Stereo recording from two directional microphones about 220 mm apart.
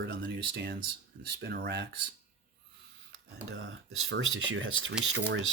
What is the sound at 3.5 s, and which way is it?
Speech, 65° right (ahead or behind).